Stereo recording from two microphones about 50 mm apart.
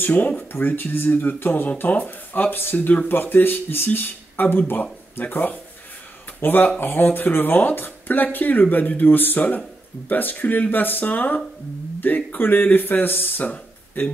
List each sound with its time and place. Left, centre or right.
0.0 s speech: left
13.4 s speech: left